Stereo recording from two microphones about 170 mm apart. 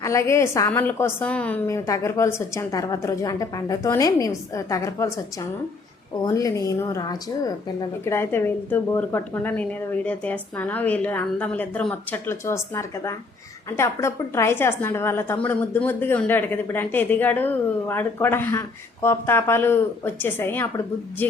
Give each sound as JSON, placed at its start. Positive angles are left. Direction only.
{"t": 0.0, "sound": "a woman's voice", "side_deg": 15}
{"t": 6.2, "sound": "a woman's voice", "side_deg": 20}